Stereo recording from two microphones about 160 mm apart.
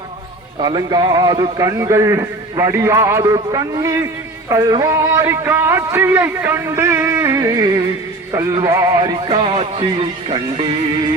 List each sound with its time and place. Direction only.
0.6 s a man's voice: 25° right (ahead or behind)